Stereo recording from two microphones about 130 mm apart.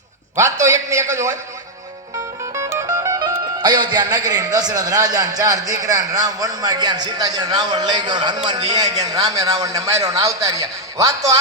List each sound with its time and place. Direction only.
0.6 s a man's voice: 25° right (ahead or behind)
2.5 s music: 20° right (ahead or behind)
3.6 s a man's voice: 35° right (ahead or behind)